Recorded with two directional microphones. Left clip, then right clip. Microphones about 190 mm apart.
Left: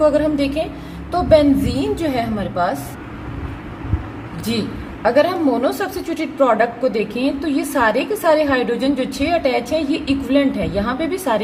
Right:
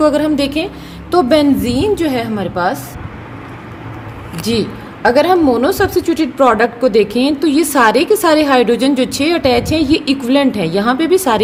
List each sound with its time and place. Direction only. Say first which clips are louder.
0.0 s a woman's voice: right 3 dB; 50° right (ahead or behind)
4.5 s a woman's voice: right 6 dB; 45° right (ahead or behind)